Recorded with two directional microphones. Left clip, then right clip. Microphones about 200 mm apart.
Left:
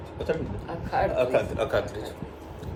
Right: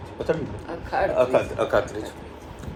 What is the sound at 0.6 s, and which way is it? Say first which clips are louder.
Speech: right 2 dB; 20° left (ahead or behind).